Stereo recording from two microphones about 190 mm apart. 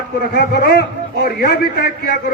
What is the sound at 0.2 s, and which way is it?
A man's voice, 55° left (ahead or behind).